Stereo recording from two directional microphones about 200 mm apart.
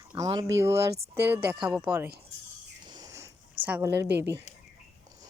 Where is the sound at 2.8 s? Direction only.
20° right (ahead or behind).